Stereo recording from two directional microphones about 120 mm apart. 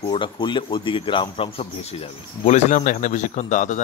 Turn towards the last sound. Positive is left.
turn(degrees=90)